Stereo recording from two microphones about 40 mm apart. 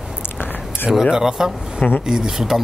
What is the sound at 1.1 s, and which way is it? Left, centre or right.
Speech, centre.